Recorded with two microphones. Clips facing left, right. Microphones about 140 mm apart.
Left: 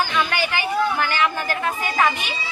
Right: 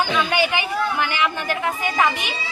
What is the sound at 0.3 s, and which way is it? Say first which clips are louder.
A woman's voice: right 2 dB; 20° right (ahead or behind).